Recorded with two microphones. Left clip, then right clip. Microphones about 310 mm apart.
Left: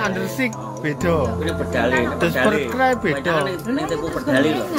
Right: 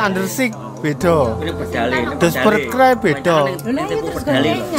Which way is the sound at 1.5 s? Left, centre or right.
Centre.